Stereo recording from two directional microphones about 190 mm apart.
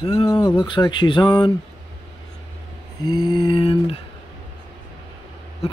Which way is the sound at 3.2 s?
25° left (ahead or behind).